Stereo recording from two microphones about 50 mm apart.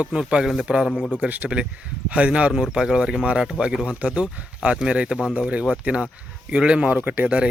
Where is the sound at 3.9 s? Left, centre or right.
Right.